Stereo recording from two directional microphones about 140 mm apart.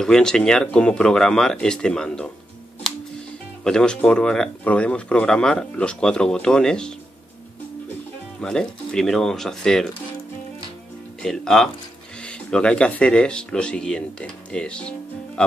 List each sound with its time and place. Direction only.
0.0 s speech: 5° left (ahead or behind)
3.6 s speech: 5° left (ahead or behind)
8.4 s speech: 5° left (ahead or behind)
11.2 s speech: 5° left (ahead or behind)